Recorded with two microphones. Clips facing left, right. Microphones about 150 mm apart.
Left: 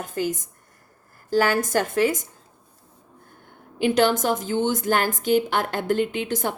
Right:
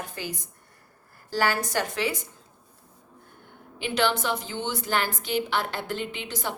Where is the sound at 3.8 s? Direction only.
45° left (ahead or behind).